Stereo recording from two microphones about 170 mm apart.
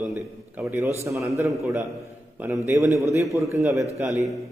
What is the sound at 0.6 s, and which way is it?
A man's voice, 15° right (ahead or behind).